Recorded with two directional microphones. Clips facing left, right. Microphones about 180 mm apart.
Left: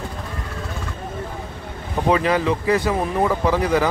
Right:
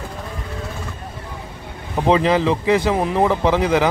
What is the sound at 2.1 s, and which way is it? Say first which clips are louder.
Speech: right 3 dB; 25° right (ahead or behind).